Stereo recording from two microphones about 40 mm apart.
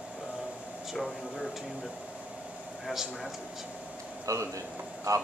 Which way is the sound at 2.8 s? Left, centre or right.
Centre.